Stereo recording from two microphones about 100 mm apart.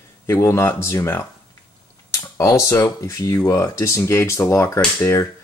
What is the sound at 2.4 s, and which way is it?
Speech, 30° left (ahead or behind).